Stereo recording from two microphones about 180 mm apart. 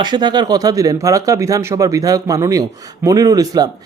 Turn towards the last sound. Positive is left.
turn(degrees=-20)  # may be behind; listen again after turning